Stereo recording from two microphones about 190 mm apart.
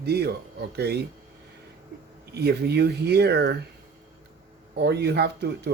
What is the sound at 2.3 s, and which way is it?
Speech, 60° right (ahead or behind).